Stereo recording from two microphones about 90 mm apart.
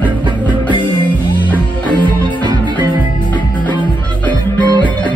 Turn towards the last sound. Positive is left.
turn(degrees=-55)  # may be behind; listen again after turning